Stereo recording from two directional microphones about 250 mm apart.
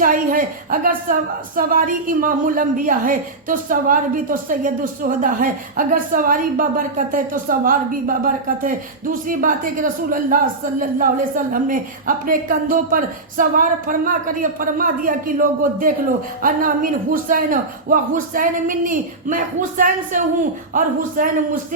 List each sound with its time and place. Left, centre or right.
0.0 s a woman's voice: right